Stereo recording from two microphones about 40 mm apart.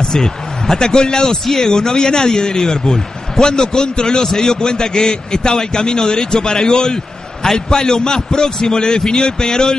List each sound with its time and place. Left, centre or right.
0.0 s a man's voice: centre
1.4 s a man's voice: centre